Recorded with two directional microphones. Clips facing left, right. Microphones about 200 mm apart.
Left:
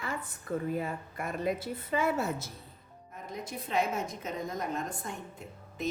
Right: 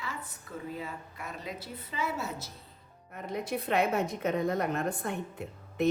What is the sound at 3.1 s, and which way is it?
A woman's voice, 65° right (ahead or behind).